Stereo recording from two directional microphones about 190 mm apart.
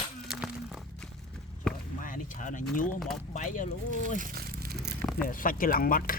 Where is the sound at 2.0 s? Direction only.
45° left (ahead or behind).